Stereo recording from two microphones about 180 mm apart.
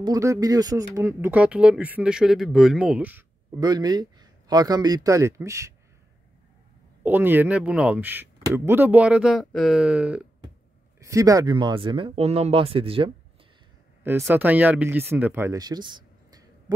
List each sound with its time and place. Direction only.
0.0 s speech: 20° right (ahead or behind)
3.5 s speech: 20° right (ahead or behind)
7.0 s speech: 10° right (ahead or behind)
11.0 s speech: 20° right (ahead or behind)
14.0 s speech: 10° right (ahead or behind)